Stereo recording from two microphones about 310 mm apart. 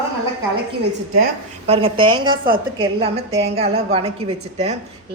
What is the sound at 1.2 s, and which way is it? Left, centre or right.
A woman's voice, centre.